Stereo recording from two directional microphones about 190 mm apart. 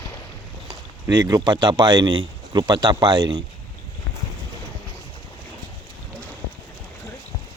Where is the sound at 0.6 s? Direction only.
15° right (ahead or behind).